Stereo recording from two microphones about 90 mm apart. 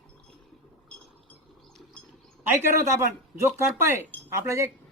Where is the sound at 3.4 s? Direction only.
30° right (ahead or behind).